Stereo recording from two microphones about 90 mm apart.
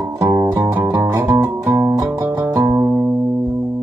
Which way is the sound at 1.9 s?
40° right (ahead or behind).